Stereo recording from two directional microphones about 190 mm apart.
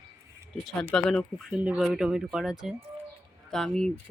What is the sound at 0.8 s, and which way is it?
Speech, centre (ahead or behind).